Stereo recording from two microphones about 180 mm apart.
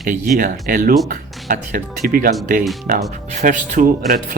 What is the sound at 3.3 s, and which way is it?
Speech, 45° right (ahead or behind).